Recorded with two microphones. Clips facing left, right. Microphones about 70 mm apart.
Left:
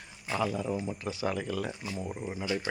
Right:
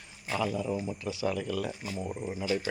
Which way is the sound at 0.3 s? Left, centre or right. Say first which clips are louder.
Even; left.